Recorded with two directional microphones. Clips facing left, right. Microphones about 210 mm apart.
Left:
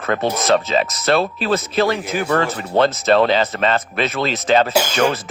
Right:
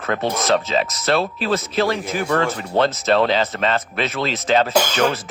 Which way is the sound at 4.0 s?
50° left (ahead or behind).